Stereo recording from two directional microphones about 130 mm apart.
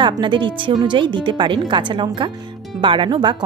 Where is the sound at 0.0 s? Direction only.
35° right (ahead or behind).